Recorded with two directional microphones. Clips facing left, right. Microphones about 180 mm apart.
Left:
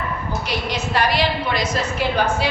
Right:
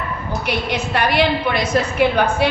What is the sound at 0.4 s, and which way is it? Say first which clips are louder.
A woman's voice: right 5 dB; 60° right (ahead or behind).